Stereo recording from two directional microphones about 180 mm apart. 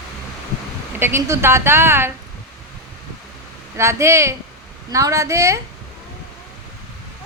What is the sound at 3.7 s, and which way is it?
A woman's voice, 15° right (ahead or behind).